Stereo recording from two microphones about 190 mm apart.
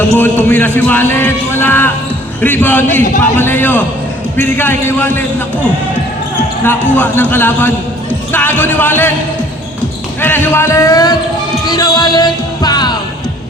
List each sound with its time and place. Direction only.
0.2 s a man's voice: 10° left (ahead or behind)
6.9 s a man's voice: 10° left (ahead or behind)
10.2 s a man's voice: 10° left (ahead or behind)
11.6 s music: 20° left (ahead or behind)